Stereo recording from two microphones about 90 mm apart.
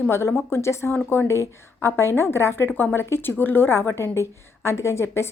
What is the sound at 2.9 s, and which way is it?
A woman's voice, 25° left (ahead or behind).